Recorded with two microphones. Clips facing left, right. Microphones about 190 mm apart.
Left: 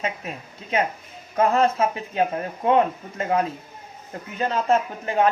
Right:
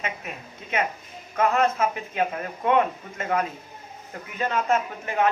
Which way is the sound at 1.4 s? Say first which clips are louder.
Left 3 dB; 30° left (ahead or behind).